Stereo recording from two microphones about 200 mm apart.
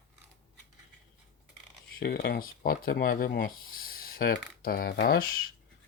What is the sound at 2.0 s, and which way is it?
Speech, 50° left (ahead or behind).